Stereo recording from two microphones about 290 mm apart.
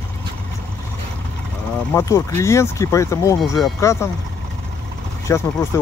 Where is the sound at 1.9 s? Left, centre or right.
Centre.